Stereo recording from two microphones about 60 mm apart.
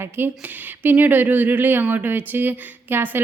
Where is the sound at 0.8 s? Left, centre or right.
Right.